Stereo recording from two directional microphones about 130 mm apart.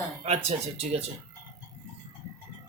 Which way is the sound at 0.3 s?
55° right (ahead or behind).